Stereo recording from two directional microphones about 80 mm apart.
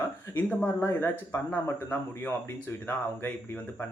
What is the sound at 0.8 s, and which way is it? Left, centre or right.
A man's voice, left.